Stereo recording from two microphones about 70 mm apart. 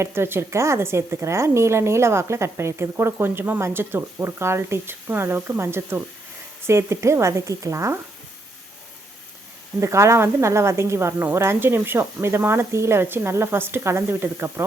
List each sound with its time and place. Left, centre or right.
0.0 s a woman's voice: right
9.8 s a woman's voice: right